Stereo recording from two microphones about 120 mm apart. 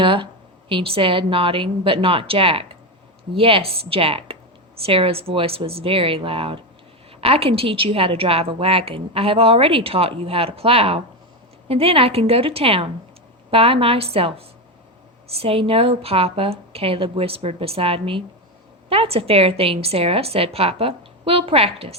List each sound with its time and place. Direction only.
0.0 s a woman's voice: 45° right (ahead or behind)